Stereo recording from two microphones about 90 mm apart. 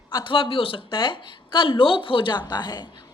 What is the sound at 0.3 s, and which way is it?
Speech, 70° left (ahead or behind).